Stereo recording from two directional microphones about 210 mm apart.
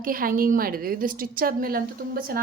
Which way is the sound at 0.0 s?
45° right (ahead or behind).